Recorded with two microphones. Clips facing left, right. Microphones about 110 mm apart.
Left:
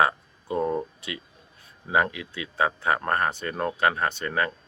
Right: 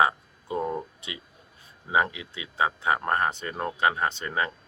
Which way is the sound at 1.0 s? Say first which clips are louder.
Left 4 dB; 25° right (ahead or behind).